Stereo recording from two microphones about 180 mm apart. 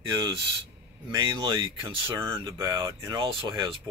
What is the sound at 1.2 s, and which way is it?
Speech, 25° right (ahead or behind).